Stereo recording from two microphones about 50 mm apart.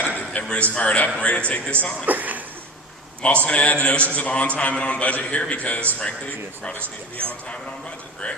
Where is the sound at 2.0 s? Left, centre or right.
Right.